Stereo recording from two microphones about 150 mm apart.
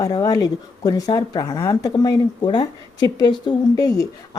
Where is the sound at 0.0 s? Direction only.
25° left (ahead or behind).